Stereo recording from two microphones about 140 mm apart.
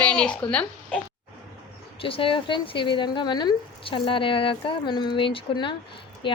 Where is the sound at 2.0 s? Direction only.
40° left (ahead or behind).